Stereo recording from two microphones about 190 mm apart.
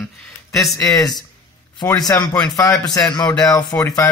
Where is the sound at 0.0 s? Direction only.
Centre (ahead or behind).